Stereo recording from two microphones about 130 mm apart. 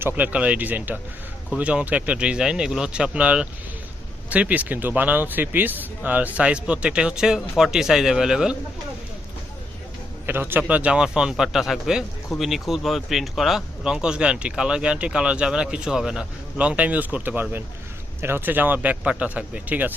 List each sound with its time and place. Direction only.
0.0 s a man's voice: 10° right (ahead or behind)
10.3 s a man's voice: 15° right (ahead or behind)